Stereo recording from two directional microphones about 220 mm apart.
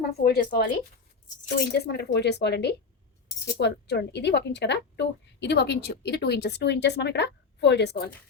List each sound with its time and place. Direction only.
0.2 s speech: 45° left (ahead or behind)